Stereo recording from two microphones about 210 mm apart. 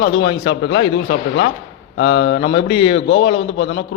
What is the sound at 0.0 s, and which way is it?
Speech, 55° left (ahead or behind).